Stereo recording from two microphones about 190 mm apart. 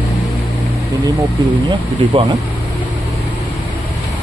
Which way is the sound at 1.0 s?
20° right (ahead or behind).